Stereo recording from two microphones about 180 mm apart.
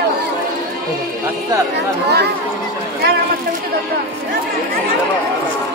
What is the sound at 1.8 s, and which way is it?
Speech, 70° right (ahead or behind).